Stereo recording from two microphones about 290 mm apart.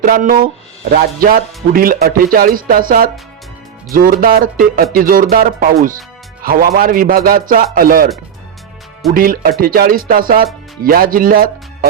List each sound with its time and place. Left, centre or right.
0.0 s speech: right
9.1 s speech: right